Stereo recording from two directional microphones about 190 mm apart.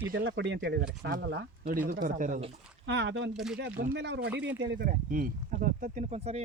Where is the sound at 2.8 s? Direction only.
65° right (ahead or behind).